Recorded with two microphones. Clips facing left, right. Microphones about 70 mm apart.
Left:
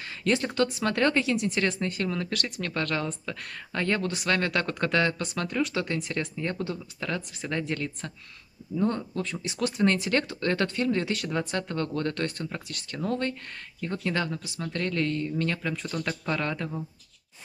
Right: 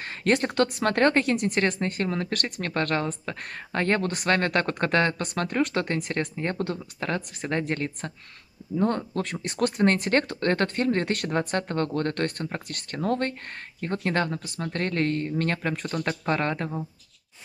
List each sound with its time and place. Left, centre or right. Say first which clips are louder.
0.0 s speech: right 3 dB; right